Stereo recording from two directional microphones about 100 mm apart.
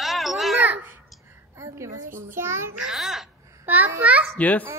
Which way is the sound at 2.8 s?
5° right (ahead or behind).